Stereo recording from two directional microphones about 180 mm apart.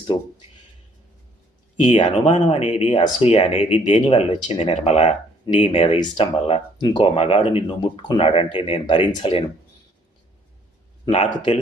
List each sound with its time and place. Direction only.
0.0 s a sound: 25° left (ahead or behind)
1.8 s speech: 40° left (ahead or behind)
11.1 s speech: 40° left (ahead or behind)